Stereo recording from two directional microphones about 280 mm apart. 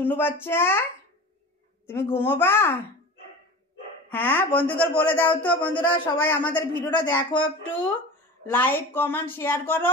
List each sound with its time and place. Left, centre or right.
0.0 s speech: centre
1.9 s speech: centre
4.1 s speech: centre
8.5 s speech: centre